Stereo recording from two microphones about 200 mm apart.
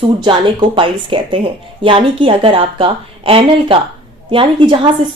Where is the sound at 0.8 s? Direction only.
25° right (ahead or behind).